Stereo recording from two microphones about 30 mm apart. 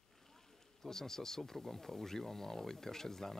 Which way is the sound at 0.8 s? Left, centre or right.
Centre.